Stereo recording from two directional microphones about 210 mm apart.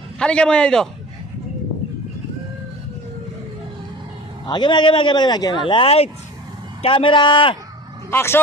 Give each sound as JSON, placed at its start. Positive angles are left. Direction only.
{"t": 0.2, "sound": "a man's voice", "side_deg": 5}
{"t": 4.5, "sound": "speech", "side_deg": 20}
{"t": 8.1, "sound": "speech", "side_deg": 10}